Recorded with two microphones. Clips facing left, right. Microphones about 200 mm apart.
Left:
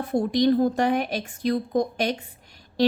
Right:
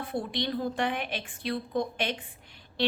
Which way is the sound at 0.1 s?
45° left (ahead or behind).